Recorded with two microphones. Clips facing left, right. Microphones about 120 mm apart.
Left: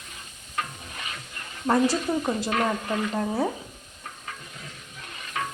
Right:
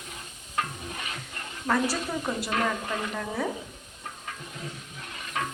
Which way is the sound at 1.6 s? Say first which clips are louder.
Left 5 dB; 25° left (ahead or behind).